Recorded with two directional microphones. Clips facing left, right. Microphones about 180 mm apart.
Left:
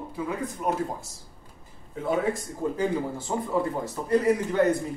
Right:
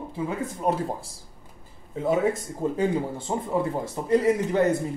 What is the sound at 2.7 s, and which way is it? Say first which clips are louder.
Speech: right 2 dB; 25° right (ahead or behind).